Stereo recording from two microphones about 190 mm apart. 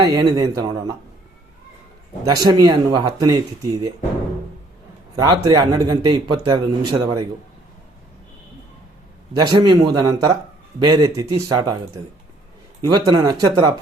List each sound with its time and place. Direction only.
0.0 s a man's voice: 25° right (ahead or behind)
2.2 s a man's voice: 20° right (ahead or behind)
5.2 s a man's voice: 20° right (ahead or behind)
9.3 s a man's voice: 25° right (ahead or behind)
13.1 s a man's voice: 20° right (ahead or behind)